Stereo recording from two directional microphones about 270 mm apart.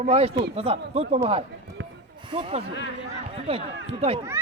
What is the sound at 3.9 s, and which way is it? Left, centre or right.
Speech, right.